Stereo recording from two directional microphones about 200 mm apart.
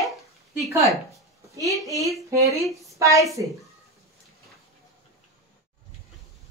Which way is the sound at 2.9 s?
15° right (ahead or behind).